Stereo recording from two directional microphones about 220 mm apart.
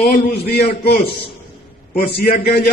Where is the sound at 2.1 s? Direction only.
45° left (ahead or behind).